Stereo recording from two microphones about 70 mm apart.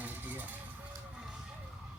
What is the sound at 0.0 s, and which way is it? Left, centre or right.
Vehicle, right.